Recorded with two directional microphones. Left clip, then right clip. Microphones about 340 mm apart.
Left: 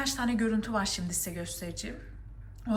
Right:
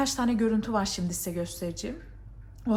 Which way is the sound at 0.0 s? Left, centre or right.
Centre.